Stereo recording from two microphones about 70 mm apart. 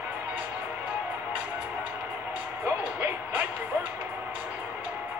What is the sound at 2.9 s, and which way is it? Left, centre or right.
Music, right.